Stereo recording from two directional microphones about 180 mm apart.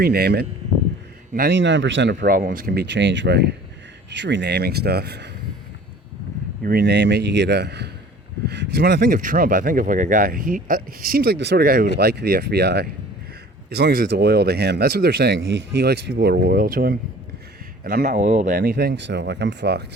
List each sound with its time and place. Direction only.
0.0 s speech: 60° right (ahead or behind)
1.5 s speech: 85° right
2.3 s a man's voice: 50° right (ahead or behind)
6.6 s a man's voice: 55° right (ahead or behind)